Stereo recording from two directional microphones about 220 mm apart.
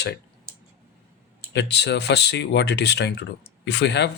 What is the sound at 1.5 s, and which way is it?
Speech, 50° left (ahead or behind).